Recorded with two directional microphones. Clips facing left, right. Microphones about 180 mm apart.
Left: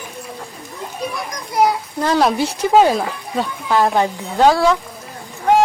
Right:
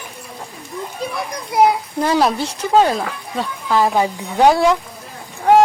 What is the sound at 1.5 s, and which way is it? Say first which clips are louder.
Children playing: right 2 dB; 25° right (ahead or behind).